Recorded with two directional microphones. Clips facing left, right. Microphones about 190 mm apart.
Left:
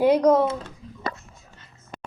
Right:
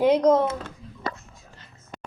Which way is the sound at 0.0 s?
10° left (ahead or behind).